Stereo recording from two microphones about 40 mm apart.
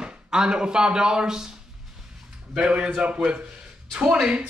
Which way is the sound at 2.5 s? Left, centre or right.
Right.